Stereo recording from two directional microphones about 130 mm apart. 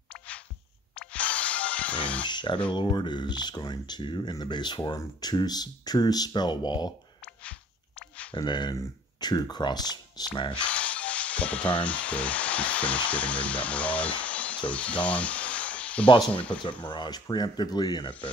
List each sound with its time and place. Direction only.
0.9 s music: 10° left (ahead or behind)
2.2 s speech: 35° left (ahead or behind)
7.4 s a sound: 10° left (ahead or behind)
8.4 s speech: 35° left (ahead or behind)
10.7 s speech: 10° left (ahead or behind)
16.6 s speech: 35° left (ahead or behind)